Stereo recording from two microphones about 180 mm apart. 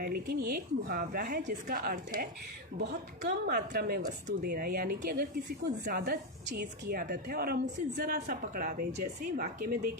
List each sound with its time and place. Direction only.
0.0 s a woman's voice: 60° right (ahead or behind)
3.2 s a woman's voice: 60° right (ahead or behind)